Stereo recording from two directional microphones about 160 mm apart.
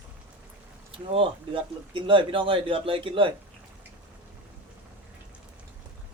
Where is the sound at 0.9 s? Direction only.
35° right (ahead or behind).